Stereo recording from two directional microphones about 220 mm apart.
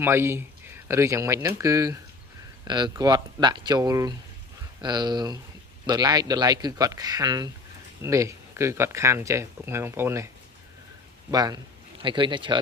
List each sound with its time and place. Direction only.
0.0 s speech: 10° right (ahead or behind)